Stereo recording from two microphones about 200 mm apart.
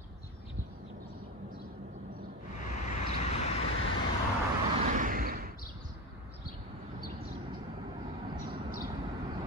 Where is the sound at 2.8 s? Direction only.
35° left (ahead or behind).